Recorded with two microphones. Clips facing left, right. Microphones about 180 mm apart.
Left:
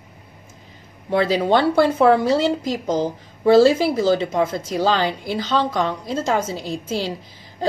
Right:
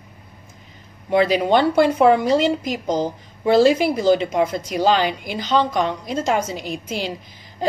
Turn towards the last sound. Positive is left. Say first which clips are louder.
# left 2 dB
turn(degrees=-15)  # may be behind; listen again after turning